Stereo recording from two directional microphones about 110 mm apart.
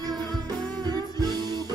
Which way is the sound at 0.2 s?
35° right (ahead or behind).